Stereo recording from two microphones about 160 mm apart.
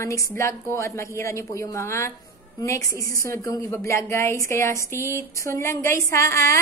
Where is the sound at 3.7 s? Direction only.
15° left (ahead or behind).